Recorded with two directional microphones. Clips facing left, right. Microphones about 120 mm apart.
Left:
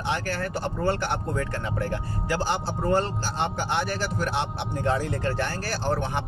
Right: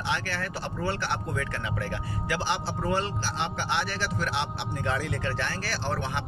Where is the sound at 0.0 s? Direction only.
45° left (ahead or behind).